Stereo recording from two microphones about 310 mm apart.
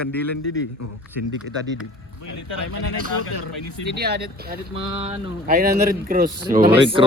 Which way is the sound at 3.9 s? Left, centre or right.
Right.